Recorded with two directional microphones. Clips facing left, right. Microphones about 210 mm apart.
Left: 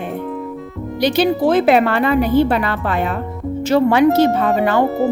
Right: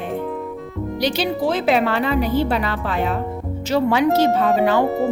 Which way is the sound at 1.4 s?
55° left (ahead or behind).